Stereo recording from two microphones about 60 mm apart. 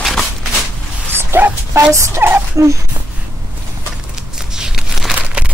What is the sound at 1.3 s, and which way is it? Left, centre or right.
Speech, right.